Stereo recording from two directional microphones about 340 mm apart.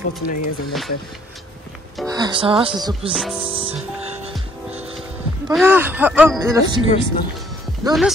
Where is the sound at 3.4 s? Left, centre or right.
Centre.